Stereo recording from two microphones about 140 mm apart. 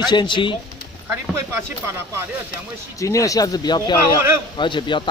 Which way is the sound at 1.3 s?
15° right (ahead or behind).